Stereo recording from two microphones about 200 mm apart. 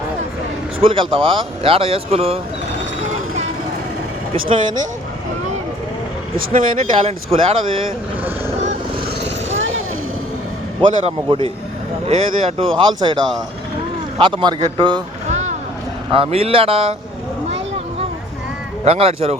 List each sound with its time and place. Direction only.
0.8 s speech: 25° right (ahead or behind)
4.4 s speech: 25° right (ahead or behind)
6.3 s speech: 45° right (ahead or behind)
7.0 s speech: 30° right (ahead or behind)
10.8 s speech: 25° right (ahead or behind)
15.3 s a sound: 35° right (ahead or behind)
16.1 s speech: 30° right (ahead or behind)
18.9 s speech: 30° right (ahead or behind)